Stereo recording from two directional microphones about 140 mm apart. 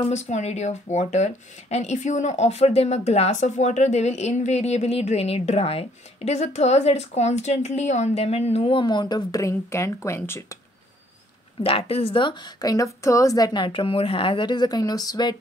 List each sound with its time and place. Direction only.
0.0 s speech: 55° left (ahead or behind); by 10.4 s 20° left (ahead or behind)
11.6 s a woman's voice: 40° left (ahead or behind)
12.7 s a woman's voice: 20° left (ahead or behind)